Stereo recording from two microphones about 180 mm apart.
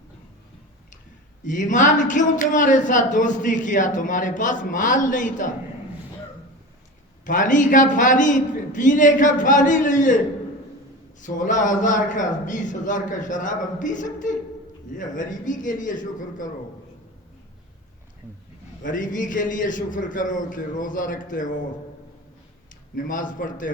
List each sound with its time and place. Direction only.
1.5 s a man's voice: 45° left (ahead or behind)
7.3 s a man's voice: 45° left (ahead or behind)
11.2 s a man's voice: 45° left (ahead or behind)
18.8 s a man's voice: 45° left (ahead or behind)
23.0 s a man's voice: 45° left (ahead or behind)